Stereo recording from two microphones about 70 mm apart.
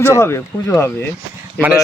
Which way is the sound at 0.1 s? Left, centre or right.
Left.